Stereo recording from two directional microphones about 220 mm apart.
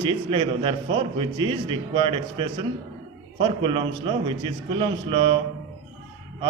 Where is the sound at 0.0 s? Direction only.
20° right (ahead or behind).